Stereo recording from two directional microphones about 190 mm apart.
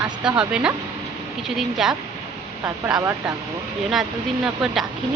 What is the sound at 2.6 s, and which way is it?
Speech, 20° right (ahead or behind).